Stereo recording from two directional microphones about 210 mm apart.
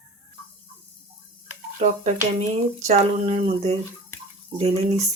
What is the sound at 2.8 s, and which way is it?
Speech, 30° right (ahead or behind).